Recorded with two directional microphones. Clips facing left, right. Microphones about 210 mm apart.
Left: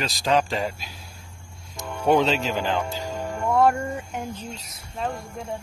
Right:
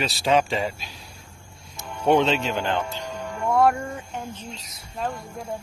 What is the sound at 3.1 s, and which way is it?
Music, 45° left (ahead or behind).